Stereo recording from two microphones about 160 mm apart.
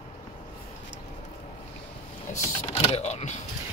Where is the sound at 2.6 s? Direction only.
40° left (ahead or behind).